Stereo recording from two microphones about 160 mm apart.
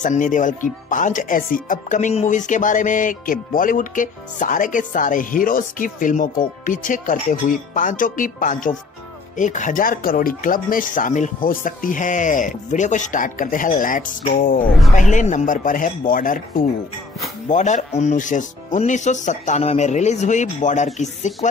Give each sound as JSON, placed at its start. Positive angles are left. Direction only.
{"t": 0.0, "sound": "speech", "side_deg": 55}
{"t": 15.0, "sound": "speech", "side_deg": 50}
{"t": 17.5, "sound": "speech", "side_deg": 50}